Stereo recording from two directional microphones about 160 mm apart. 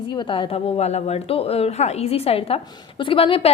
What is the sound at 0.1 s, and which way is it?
A woman's voice, 30° left (ahead or behind).